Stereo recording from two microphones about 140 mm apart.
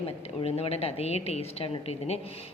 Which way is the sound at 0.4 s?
45° left (ahead or behind).